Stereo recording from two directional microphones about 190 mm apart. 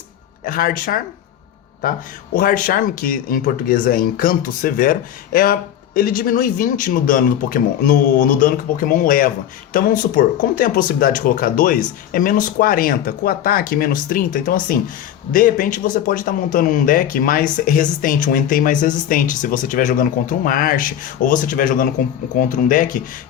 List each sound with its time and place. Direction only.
0.4 s speech: 45° left (ahead or behind)
2.3 s speech: 45° left (ahead or behind)